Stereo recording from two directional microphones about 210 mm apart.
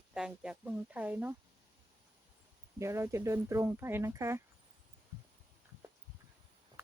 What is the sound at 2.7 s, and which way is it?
Speech, 15° right (ahead or behind).